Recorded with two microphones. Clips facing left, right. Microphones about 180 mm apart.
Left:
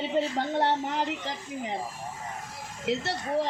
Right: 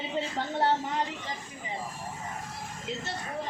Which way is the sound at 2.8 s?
75° left (ahead or behind).